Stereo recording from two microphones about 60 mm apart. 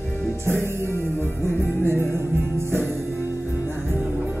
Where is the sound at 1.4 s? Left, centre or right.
Right.